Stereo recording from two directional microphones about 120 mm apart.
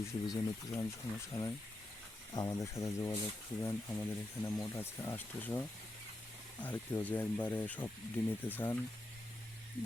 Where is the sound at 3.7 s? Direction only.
10° left (ahead or behind).